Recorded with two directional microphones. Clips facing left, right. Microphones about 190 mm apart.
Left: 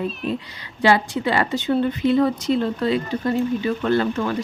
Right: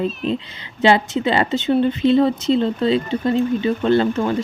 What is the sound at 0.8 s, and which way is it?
Speech, 25° right (ahead or behind).